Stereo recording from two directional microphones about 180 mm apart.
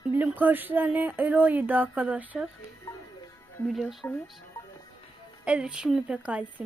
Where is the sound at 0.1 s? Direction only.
10° right (ahead or behind).